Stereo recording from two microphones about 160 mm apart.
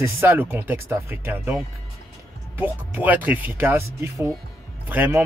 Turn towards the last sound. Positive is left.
turn(degrees=-10)  # may be behind; listen again after turning